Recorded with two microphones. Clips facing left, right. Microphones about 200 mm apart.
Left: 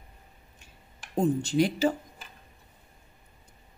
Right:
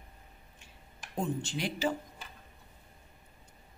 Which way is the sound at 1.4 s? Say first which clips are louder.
Left 10 dB; 40° left (ahead or behind).